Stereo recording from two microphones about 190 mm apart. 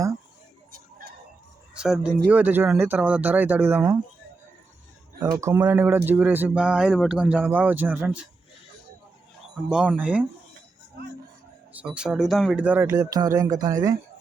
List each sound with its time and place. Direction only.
0.7 s a sound: 50° right (ahead or behind)
1.7 s speech: 5° right (ahead or behind)
5.4 s speech: 15° right (ahead or behind)
9.6 s speech: 5° right (ahead or behind)
11.7 s speech: 5° right (ahead or behind)